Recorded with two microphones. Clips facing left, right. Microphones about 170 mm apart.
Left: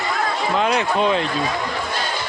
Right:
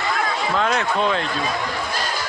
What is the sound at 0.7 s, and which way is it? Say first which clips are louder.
Speech: left 2 dB; 15° left (ahead or behind).